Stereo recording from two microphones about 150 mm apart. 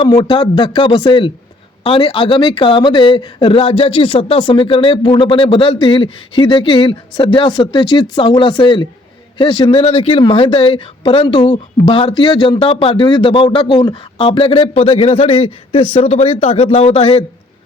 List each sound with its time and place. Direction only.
0.0 s speech: 30° left (ahead or behind)